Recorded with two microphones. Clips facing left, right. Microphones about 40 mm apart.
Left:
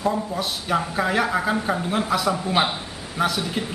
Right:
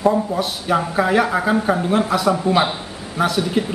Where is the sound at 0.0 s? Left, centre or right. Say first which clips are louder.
Right 6 dB; centre.